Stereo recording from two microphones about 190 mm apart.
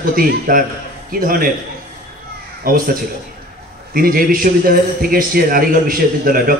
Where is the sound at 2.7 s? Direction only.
50° right (ahead or behind).